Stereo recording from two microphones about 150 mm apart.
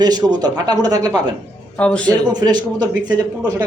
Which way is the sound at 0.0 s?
25° right (ahead or behind).